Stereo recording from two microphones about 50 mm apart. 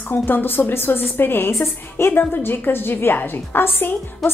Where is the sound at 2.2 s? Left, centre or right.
Left.